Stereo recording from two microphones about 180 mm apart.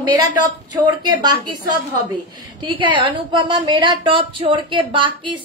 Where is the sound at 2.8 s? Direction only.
25° right (ahead or behind).